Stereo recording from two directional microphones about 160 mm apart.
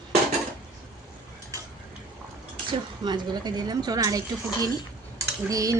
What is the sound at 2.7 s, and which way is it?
A woman's voice, 30° right (ahead or behind).